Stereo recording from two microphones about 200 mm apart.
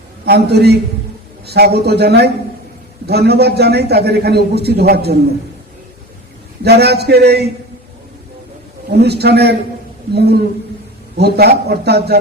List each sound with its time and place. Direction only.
0.3 s a man's voice: 55° right (ahead or behind)
6.7 s a man's voice: 55° right (ahead or behind)
8.9 s a man's voice: 55° right (ahead or behind)